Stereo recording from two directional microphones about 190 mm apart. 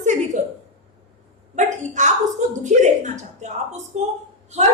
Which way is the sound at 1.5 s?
40° right (ahead or behind).